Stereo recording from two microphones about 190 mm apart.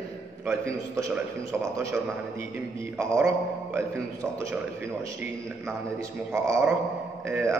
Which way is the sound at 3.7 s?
15° right (ahead or behind).